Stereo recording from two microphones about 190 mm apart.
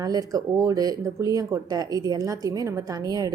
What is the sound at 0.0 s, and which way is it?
A woman's voice, 20° right (ahead or behind).